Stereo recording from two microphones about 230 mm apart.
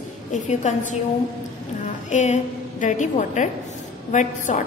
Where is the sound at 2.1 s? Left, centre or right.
Left.